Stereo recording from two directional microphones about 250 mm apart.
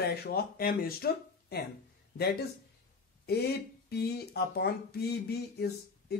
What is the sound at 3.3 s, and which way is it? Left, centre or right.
Speech, left.